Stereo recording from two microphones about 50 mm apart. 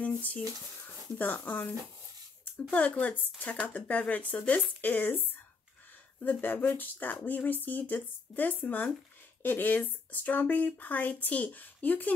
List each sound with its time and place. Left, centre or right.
0.0 s a sound: left
1.1 s speech: left
2.7 s speech: left
4.8 s speech: left